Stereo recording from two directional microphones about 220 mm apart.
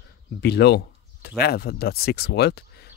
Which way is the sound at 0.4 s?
50° left (ahead or behind).